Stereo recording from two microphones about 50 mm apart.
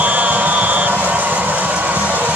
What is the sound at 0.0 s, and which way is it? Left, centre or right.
Music, right.